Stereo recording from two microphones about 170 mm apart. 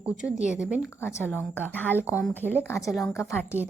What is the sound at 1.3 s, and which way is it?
A woman's voice, 10° left (ahead or behind).